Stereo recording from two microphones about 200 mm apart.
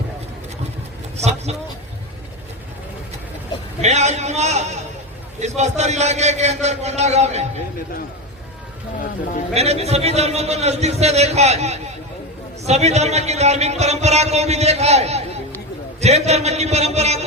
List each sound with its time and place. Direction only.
1.1 s a sound: 35° right (ahead or behind)
3.8 s a man's voice: 35° right (ahead or behind)
9.6 s speech: 30° right (ahead or behind)